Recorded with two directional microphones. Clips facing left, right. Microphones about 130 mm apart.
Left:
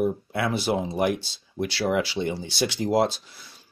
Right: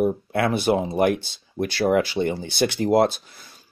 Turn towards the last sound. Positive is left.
turn(degrees=-50)  # may be behind; listen again after turning